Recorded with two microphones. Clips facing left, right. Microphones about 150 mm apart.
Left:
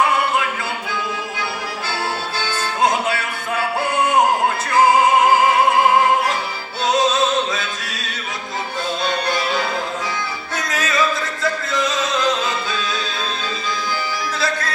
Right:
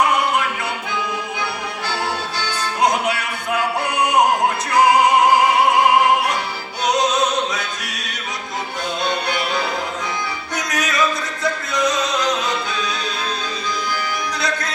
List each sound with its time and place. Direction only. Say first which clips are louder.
3.9 s music: left 1 dB; 20° right (ahead or behind)
6.8 s opera: left 1 dB; 20° right (ahead or behind)
10.6 s music: even; 20° right (ahead or behind)
14.3 s music: left 3 dB; 20° right (ahead or behind)